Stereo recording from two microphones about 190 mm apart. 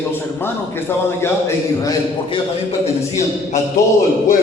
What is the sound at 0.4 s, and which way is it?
A man's voice, 10° left (ahead or behind).